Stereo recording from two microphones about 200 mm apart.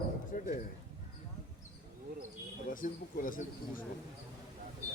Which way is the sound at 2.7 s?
45° left (ahead or behind).